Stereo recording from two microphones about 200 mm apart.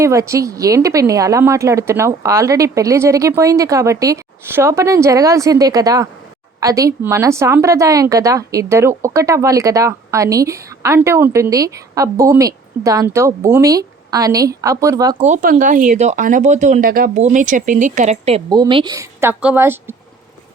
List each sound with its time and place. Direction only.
0.0 s speech: 15° right (ahead or behind)
15.2 s speech: 40° right (ahead or behind); by 20.0 s 10° right (ahead or behind)